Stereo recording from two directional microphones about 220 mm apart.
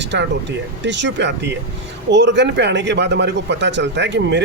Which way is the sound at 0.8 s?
55° right (ahead or behind).